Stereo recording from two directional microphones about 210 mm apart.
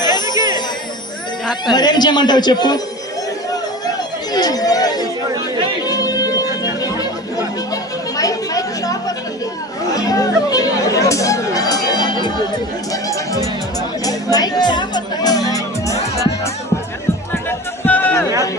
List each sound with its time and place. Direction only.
0.0 s music: 20° left (ahead or behind)
1.7 s speech: 20° left (ahead or behind)
3.5 s a sound: 15° left (ahead or behind)
5.8 s music: 20° left (ahead or behind)
6.9 s chatter: 15° left (ahead or behind)
12.9 s music: 15° left (ahead or behind)
17.5 s music: 10° left (ahead or behind)